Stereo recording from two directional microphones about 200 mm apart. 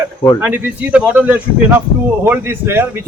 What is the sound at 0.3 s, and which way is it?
A man's voice, 10° right (ahead or behind).